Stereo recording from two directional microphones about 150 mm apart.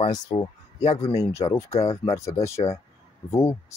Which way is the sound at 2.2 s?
20° left (ahead or behind).